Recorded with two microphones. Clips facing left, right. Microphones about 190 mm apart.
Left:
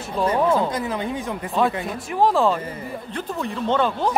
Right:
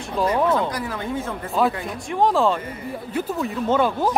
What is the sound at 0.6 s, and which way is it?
Speech, 25° left (ahead or behind).